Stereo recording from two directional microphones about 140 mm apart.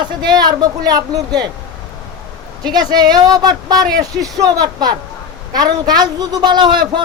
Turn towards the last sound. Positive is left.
turn(degrees=-30)  # may be behind; listen again after turning